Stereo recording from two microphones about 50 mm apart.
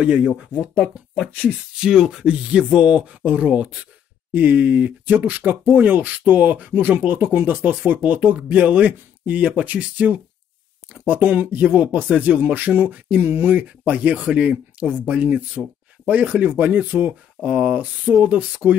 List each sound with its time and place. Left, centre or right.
0.0 s speech: right
1.8 s speech: centre; by 13.2 s right
13.2 s speech: right
13.6 s speech: right